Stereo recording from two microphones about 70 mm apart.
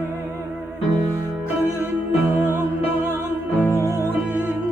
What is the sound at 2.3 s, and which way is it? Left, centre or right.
Music, right.